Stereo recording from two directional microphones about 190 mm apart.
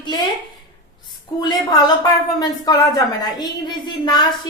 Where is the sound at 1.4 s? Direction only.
20° left (ahead or behind).